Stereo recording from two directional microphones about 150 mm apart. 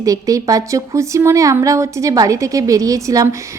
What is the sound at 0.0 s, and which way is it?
A woman's voice, 20° right (ahead or behind).